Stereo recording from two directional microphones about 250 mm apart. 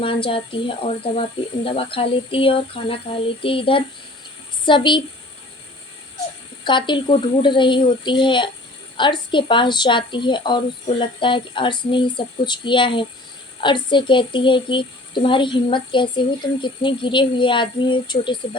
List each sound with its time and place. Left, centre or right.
0.3 s speech: left
6.7 s speech: centre